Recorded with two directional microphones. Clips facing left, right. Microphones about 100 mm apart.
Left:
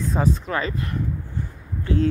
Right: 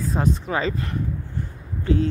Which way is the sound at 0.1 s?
Centre (ahead or behind).